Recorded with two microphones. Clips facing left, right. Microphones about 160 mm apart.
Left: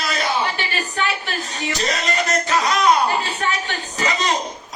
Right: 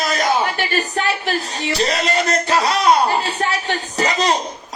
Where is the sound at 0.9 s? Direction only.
35° right (ahead or behind).